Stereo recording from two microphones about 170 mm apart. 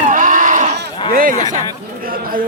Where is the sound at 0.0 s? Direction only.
50° right (ahead or behind).